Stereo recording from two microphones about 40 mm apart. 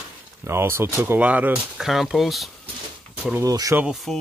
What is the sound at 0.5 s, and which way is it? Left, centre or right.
Speech, right.